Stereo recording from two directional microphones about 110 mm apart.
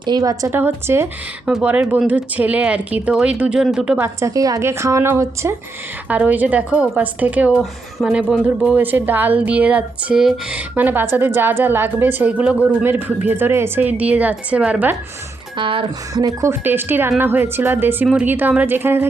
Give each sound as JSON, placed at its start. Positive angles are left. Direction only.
{"t": 0.0, "sound": "speech", "side_deg": -40}
{"t": 0.5, "sound": "a woman's voice", "side_deg": -20}
{"t": 1.5, "sound": "a woman's voice", "side_deg": -10}
{"t": 4.0, "sound": "a woman's voice", "side_deg": -30}
{"t": 6.1, "sound": "a woman's voice", "side_deg": -15}
{"t": 7.6, "sound": "speech", "side_deg": 0}
{"t": 8.8, "sound": "a woman's voice", "side_deg": -15}
{"t": 15.5, "sound": "speech", "side_deg": -50}
{"t": 16.1, "sound": "a woman's voice", "side_deg": -30}